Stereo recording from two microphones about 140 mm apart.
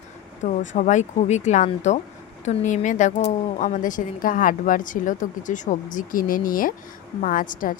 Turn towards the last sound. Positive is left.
turn(degrees=75)  # may be behind; listen again after turning